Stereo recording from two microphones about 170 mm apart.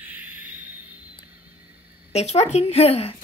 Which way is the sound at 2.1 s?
40° left (ahead or behind).